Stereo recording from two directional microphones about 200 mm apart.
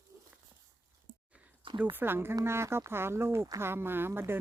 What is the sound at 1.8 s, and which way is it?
Speech, 10° right (ahead or behind).